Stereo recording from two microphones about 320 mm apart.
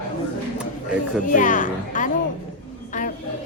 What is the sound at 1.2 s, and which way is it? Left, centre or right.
Speech, left.